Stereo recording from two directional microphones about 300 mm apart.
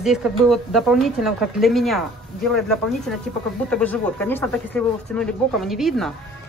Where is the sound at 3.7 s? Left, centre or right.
Centre.